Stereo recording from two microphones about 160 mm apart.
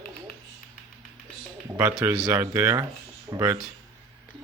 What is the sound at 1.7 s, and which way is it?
Speech, 15° right (ahead or behind).